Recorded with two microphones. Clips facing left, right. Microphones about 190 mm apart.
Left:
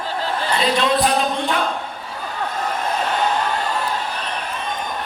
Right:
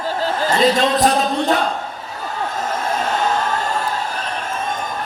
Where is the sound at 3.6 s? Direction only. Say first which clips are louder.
Right 1 dB; 45° right (ahead or behind).